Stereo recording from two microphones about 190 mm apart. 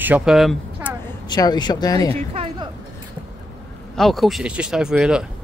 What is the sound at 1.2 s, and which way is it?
Speech, 20° left (ahead or behind).